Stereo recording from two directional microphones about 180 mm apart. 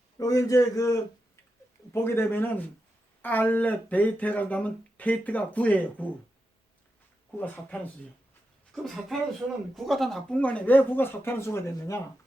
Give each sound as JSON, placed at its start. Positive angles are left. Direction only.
{"t": 0.2, "sound": "speech", "side_deg": 20}
{"t": 7.3, "sound": "speech", "side_deg": 10}